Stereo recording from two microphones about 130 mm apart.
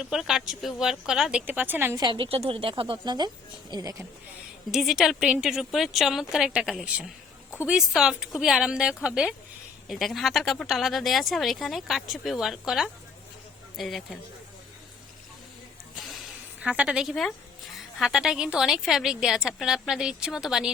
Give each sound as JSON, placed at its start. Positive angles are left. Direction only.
{"t": 0.1, "sound": "a woman's voice", "side_deg": -5}
{"t": 2.0, "sound": "speech", "side_deg": -40}
{"t": 4.7, "sound": "a woman's voice", "side_deg": 0}
{"t": 16.6, "sound": "a woman's voice", "side_deg": -10}